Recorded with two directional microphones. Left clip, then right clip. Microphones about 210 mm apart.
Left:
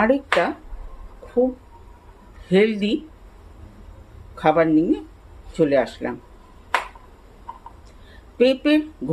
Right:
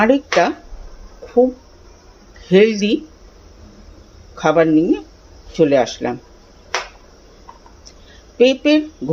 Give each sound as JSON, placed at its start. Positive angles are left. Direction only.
{"t": 0.0, "sound": "speech", "side_deg": -15}
{"t": 2.5, "sound": "speech", "side_deg": -10}
{"t": 4.4, "sound": "speech", "side_deg": -10}
{"t": 8.4, "sound": "speech", "side_deg": -5}